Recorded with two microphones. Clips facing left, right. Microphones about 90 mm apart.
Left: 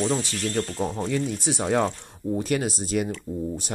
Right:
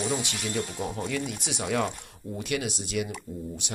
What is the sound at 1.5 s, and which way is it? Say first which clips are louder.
Speech: left 5 dB; 40° left (ahead or behind).